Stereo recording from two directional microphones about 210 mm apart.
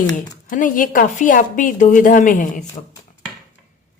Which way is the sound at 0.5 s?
40° left (ahead or behind).